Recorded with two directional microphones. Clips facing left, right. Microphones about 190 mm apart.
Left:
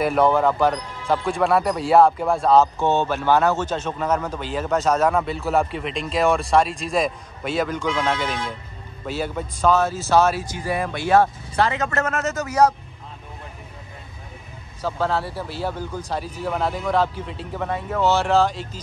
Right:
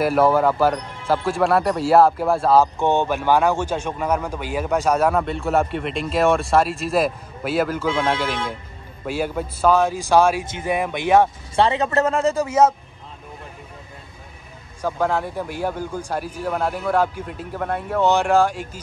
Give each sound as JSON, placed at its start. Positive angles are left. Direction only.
{"t": 0.0, "sound": "speech", "side_deg": -5}
{"t": 5.2, "sound": "speech", "side_deg": 0}
{"t": 10.4, "sound": "speech", "side_deg": -25}
{"t": 11.6, "sound": "a man's voice", "side_deg": -30}
{"t": 14.8, "sound": "speech", "side_deg": -15}